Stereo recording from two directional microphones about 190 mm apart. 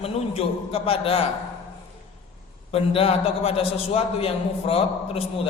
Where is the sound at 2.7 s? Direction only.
30° left (ahead or behind).